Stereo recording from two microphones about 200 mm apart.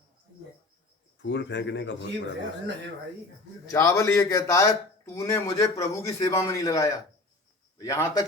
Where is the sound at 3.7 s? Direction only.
15° left (ahead or behind).